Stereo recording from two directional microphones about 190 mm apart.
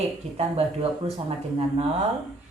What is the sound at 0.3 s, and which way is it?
A woman's voice, 30° right (ahead or behind).